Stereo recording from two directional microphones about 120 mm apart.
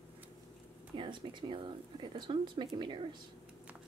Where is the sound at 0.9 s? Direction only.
45° right (ahead or behind).